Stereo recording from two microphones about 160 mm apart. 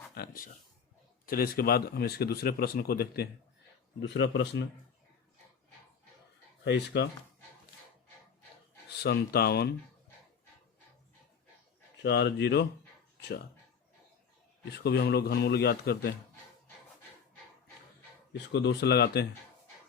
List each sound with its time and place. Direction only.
0.1 s a man's voice: 70° left (ahead or behind)
4.0 s a man's voice: 90° left
6.7 s a man's voice: 90° left
8.9 s speech: 90° left
12.0 s a man's voice: 90° left
14.7 s a man's voice: 90° left
18.5 s a man's voice: 90° left